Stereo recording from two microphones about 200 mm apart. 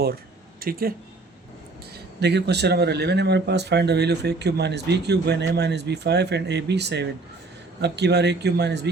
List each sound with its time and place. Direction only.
0.6 s speech: 45° right (ahead or behind)
2.2 s speech: 55° right (ahead or behind)